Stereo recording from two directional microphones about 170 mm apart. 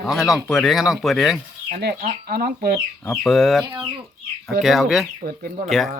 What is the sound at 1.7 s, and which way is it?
Speech, 70° right (ahead or behind).